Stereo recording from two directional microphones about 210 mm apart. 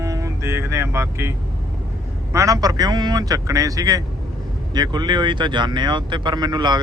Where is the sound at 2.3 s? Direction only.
15° right (ahead or behind).